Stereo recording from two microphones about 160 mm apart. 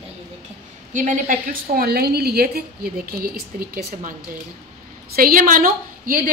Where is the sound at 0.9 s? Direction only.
50° right (ahead or behind); by 3.7 s 70° right (ahead or behind).